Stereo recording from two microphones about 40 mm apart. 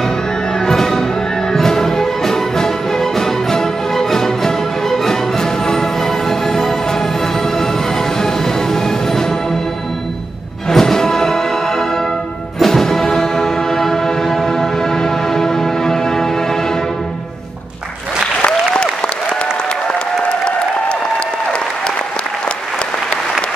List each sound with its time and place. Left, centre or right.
0.7 s music: centre
8.2 s music: centre
10.7 s music: centre
12.5 s music: centre
19.9 s applause: left